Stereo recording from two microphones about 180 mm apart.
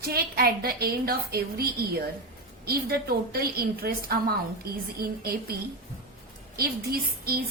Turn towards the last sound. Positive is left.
turn(degrees=-55)  # may be behind; listen again after turning